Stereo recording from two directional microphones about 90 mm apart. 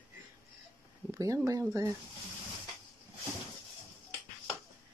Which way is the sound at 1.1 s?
40° right (ahead or behind).